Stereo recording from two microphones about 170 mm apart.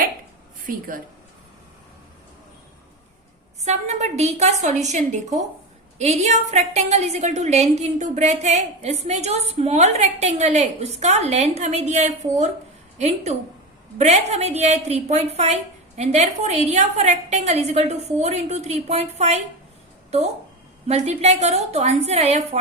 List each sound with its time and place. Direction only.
3.6 s a woman's voice: 40° right (ahead or behind)